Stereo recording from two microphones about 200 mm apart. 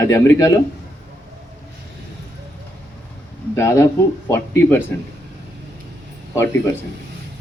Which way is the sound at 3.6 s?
15° left (ahead or behind).